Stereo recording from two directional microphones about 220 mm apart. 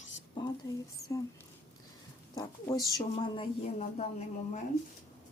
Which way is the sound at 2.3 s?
15° left (ahead or behind).